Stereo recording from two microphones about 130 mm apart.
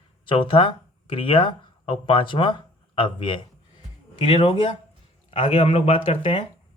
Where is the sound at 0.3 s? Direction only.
40° left (ahead or behind).